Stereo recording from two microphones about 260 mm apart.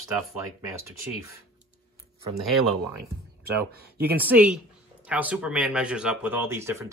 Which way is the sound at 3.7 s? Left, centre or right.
Right.